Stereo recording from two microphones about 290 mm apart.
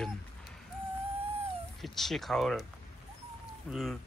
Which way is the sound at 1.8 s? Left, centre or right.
Centre.